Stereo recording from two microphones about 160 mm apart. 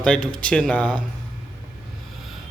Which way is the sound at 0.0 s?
5° left (ahead or behind).